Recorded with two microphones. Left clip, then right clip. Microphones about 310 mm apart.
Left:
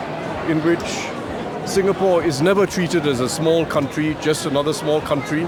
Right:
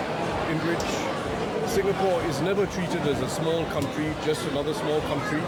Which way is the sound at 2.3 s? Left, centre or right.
Left.